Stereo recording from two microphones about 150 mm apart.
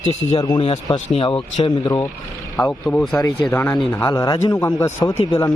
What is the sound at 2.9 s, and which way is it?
A man's voice, 10° left (ahead or behind).